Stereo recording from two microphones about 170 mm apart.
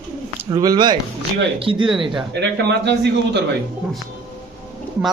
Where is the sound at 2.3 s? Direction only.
85° right.